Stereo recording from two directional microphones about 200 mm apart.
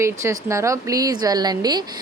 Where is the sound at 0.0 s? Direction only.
15° right (ahead or behind).